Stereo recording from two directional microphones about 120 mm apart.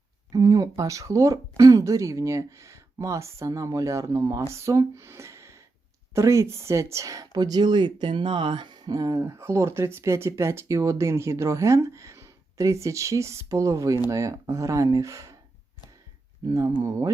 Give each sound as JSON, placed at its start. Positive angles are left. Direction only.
{"t": 0.3, "sound": "speech", "side_deg": -30}
{"t": 16.5, "sound": "speech", "side_deg": -25}